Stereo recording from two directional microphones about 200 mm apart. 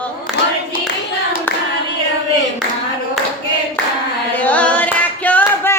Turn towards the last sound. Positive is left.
turn(degrees=10)  # may be behind; listen again after turning